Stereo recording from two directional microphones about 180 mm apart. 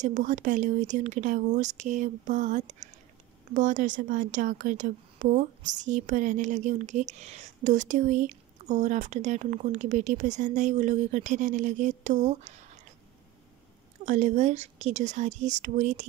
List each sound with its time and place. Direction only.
0.0 s a woman's voice: 45° right (ahead or behind)
14.0 s speech: 40° right (ahead or behind)